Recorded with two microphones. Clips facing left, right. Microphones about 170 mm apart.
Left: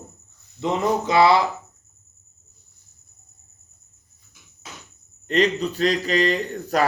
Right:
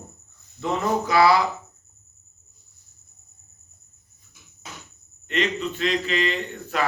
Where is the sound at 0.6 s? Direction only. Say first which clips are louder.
Left 2 dB; 20° left (ahead or behind).